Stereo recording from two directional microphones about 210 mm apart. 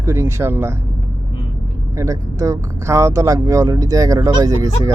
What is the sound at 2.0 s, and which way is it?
Speech, 15° right (ahead or behind).